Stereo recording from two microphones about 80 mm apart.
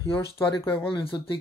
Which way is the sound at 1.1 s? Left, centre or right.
Left.